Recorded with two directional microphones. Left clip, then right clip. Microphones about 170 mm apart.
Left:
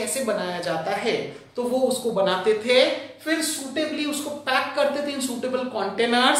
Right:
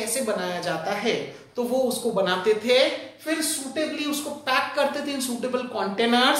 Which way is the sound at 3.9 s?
20° right (ahead or behind).